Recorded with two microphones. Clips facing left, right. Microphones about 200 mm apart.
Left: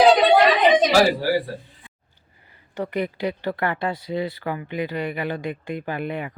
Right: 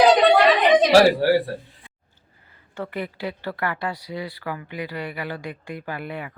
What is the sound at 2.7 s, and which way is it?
Speech, 15° left (ahead or behind).